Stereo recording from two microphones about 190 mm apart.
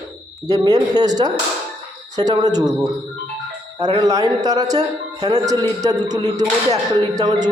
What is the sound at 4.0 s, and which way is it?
Speech, 20° right (ahead or behind).